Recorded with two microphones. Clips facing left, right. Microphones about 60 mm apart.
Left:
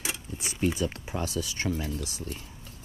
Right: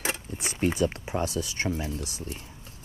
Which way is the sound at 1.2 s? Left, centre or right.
Right.